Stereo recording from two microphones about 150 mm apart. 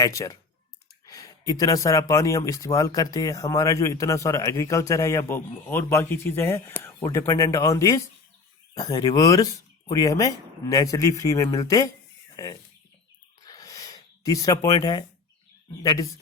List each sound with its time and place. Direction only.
0.0 s speech: 25° left (ahead or behind)
13.4 s a sound: 25° left (ahead or behind)
15.8 s speech: 25° left (ahead or behind)